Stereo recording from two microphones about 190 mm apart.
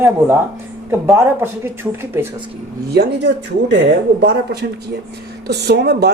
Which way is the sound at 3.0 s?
65° right (ahead or behind).